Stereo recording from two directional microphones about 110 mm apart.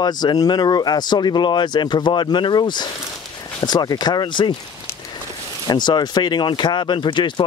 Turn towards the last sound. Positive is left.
turn(degrees=45)  # may be behind; listen again after turning